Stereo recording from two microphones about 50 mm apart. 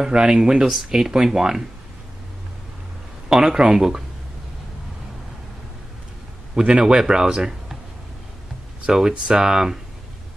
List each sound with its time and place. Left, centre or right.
0.0 s speech: centre
3.3 s speech: centre
6.5 s speech: centre
8.8 s speech: centre